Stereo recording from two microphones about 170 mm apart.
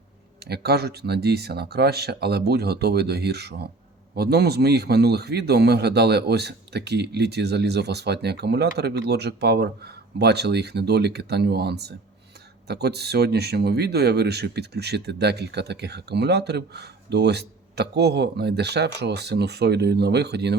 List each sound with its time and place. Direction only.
0.4 s speech: 70° right (ahead or behind)